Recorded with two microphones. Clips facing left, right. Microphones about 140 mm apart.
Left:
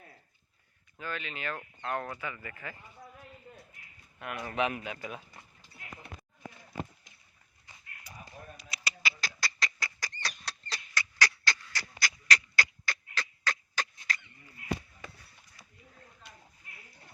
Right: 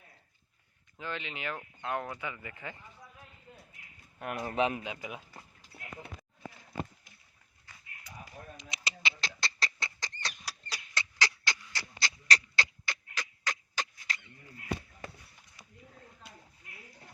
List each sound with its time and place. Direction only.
0.9 s speech: 20° right (ahead or behind)
4.2 s speech: 35° right (ahead or behind); by 5.2 s 15° right (ahead or behind)
8.5 s duck: 20° right (ahead or behind)
10.4 s a sound: 5° right (ahead or behind)
10.9 s a sound: 20° right (ahead or behind)
14.1 s honk: 20° right (ahead or behind)